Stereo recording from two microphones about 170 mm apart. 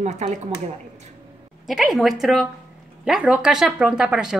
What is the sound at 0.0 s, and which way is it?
Speech, 45° right (ahead or behind).